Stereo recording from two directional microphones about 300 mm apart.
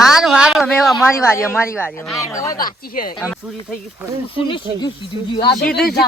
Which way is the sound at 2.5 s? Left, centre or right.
Left.